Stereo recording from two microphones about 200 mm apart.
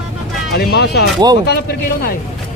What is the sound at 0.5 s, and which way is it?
Speech, 50° left (ahead or behind).